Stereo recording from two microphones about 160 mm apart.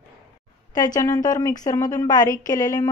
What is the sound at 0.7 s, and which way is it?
Speech, 25° left (ahead or behind).